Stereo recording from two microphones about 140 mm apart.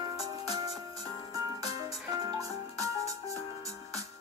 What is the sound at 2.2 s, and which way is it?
Music, 25° right (ahead or behind).